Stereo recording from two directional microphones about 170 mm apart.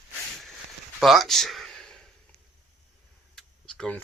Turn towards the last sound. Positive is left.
turn(degrees=5)  # may be behind; listen again after turning